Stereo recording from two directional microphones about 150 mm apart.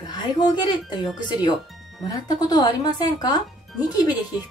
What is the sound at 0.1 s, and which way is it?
A woman's voice, 30° left (ahead or behind).